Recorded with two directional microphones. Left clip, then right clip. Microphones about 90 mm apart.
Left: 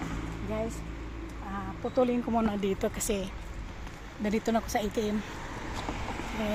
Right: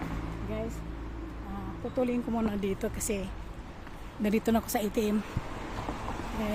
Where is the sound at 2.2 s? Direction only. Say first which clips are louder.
Left 3 dB; 15° right (ahead or behind).